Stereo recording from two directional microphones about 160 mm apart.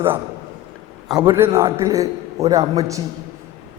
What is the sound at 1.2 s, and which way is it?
A man's voice, 15° right (ahead or behind).